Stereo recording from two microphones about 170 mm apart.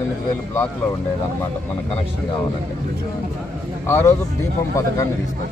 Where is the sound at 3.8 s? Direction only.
15° left (ahead or behind).